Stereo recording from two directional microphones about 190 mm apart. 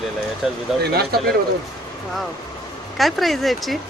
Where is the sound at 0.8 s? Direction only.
55° right (ahead or behind).